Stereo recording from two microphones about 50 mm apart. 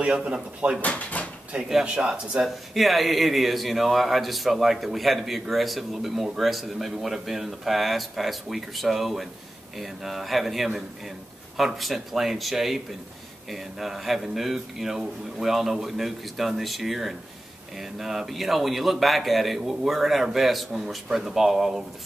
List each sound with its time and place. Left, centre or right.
0.0 s speech: right
0.7 s speech: left
1.5 s speech: right
2.7 s speech: centre